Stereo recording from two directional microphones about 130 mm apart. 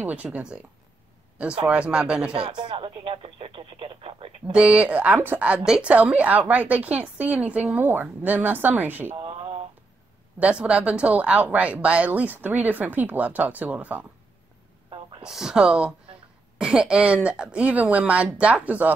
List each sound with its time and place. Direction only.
0.0 s speech: 10° right (ahead or behind)
1.7 s speech: 5° right (ahead or behind)
2.3 s speech: 35° right (ahead or behind)
4.5 s speech: 10° right (ahead or behind)
9.2 s a sound: 45° right (ahead or behind)
10.4 s speech: 10° right (ahead or behind)
15.2 s speech: 5° right (ahead or behind)